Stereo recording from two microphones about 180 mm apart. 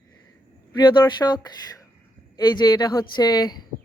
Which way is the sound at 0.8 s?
25° left (ahead or behind).